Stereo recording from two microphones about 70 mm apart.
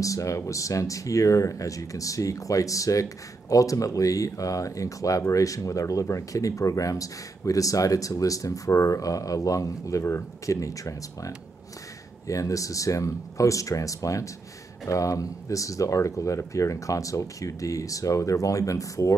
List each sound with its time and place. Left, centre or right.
0.0 s speech: left